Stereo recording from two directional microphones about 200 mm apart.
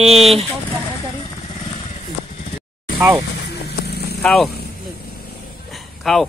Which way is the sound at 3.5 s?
55° left (ahead or behind).